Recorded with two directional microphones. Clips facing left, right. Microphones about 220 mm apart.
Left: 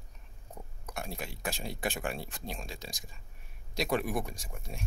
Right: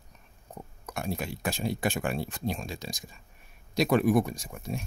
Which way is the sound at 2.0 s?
45° right (ahead or behind).